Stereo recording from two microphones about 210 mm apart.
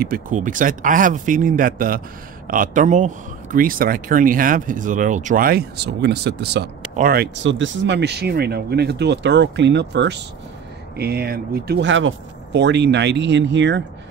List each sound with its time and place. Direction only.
0.0 s speech: 40° right (ahead or behind)
7.4 s speech: 65° right (ahead or behind)